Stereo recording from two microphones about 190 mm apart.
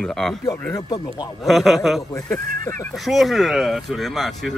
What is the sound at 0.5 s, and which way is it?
Speech, 15° left (ahead or behind).